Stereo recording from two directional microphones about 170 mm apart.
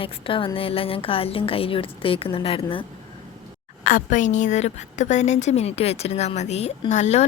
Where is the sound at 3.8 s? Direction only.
50° left (ahead or behind).